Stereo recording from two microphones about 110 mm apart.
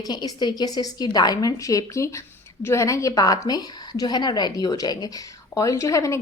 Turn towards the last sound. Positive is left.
turn(degrees=30)  # may be behind; listen again after turning